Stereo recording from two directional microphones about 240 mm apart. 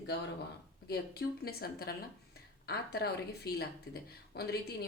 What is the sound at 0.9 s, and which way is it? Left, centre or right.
Speech, left.